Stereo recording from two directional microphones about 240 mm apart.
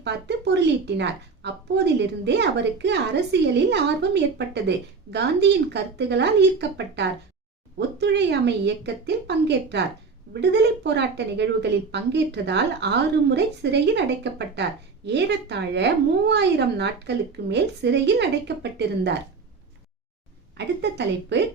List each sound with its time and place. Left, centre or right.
0.0 s a woman's voice: right
20.6 s a woman's voice: right